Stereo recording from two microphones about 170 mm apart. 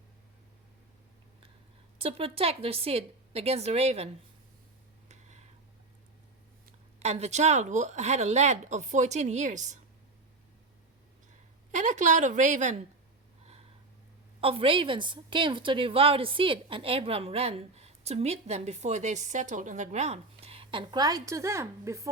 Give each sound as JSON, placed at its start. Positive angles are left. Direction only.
{"t": 2.0, "sound": "a woman's voice", "side_deg": -35}
{"t": 5.0, "sound": "a sound", "side_deg": -40}
{"t": 7.0, "sound": "speech", "side_deg": -40}
{"t": 11.7, "sound": "speech", "side_deg": -45}
{"t": 14.4, "sound": "a woman's voice", "side_deg": -30}